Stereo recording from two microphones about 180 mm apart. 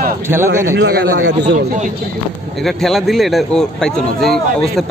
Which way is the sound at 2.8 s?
Centre (ahead or behind).